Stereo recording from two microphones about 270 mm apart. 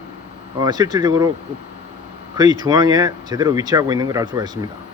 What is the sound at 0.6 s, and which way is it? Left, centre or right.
Speech, centre.